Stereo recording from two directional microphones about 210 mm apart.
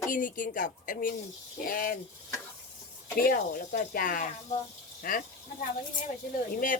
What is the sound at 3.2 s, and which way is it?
Speech, 40° left (ahead or behind).